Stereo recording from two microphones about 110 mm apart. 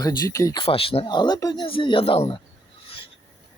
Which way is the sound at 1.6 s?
55° left (ahead or behind).